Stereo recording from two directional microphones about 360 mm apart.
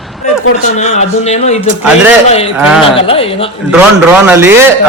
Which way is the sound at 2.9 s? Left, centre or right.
Centre.